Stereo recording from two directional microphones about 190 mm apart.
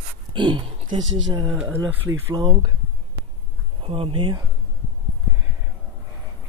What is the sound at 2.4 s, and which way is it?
Speech, 30° right (ahead or behind).